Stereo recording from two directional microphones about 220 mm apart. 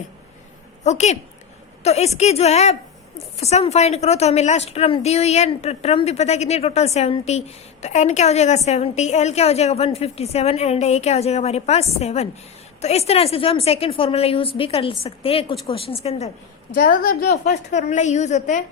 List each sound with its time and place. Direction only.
0.9 s a woman's voice: 30° left (ahead or behind)
16.7 s a woman's voice: 45° left (ahead or behind)